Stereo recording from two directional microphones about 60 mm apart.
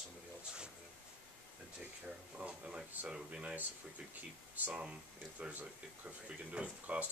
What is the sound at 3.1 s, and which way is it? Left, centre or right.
Speech, centre.